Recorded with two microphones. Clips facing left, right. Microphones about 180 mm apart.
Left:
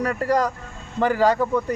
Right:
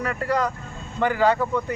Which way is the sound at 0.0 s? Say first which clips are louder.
Left 3 dB; 40° left (ahead or behind).